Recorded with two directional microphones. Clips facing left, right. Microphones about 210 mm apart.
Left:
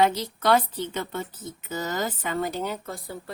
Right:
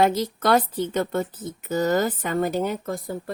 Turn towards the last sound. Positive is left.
turn(degrees=-45)  # may be behind; listen again after turning